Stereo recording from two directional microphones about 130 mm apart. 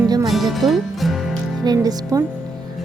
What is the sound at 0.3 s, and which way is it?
Music, centre (ahead or behind).